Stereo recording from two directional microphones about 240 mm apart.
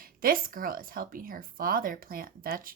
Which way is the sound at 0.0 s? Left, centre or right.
Right.